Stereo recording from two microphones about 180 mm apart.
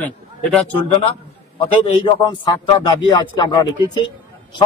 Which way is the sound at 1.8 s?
25° left (ahead or behind).